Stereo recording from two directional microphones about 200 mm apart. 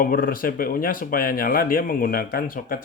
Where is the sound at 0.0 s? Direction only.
45° left (ahead or behind).